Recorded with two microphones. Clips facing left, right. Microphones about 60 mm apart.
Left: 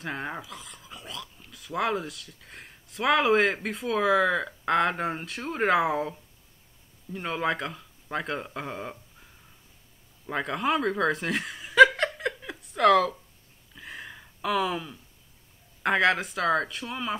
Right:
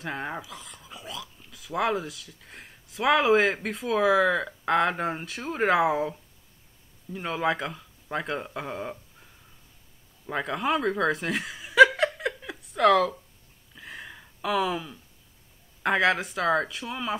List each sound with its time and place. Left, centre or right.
0.0 s speech: centre
10.2 s chuckle: centre
13.7 s a sound: centre
15.8 s speech: centre